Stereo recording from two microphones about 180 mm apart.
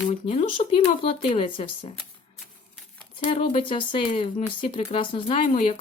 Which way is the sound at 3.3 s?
30° left (ahead or behind).